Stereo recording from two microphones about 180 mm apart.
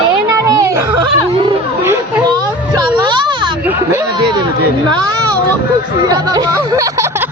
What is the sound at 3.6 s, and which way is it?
Speech, 10° right (ahead or behind).